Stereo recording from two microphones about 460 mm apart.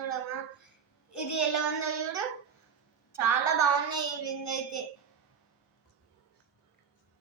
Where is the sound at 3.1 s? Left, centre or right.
Left.